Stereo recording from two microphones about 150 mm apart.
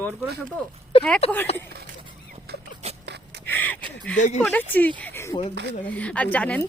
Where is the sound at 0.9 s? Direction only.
35° left (ahead or behind).